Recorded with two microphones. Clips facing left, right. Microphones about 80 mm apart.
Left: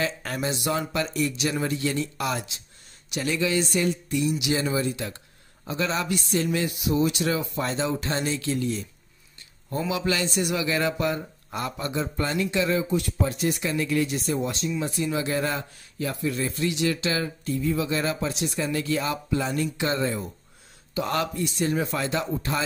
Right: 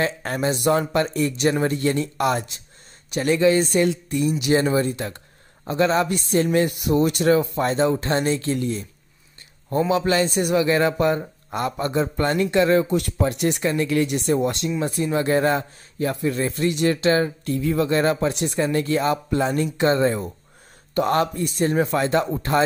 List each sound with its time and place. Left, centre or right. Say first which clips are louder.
0.0 s a man's voice: right 5 dB; right
12.8 s speech: right 4 dB; right
13.6 s speech: right 5 dB; right
13.8 s a man's voice: right 4 dB; right
17.5 s speech: right 1 dB; right
17.8 s a man's voice: right 7 dB; right